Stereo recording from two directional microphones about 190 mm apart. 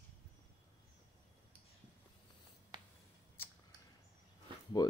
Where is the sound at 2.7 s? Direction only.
25° right (ahead or behind).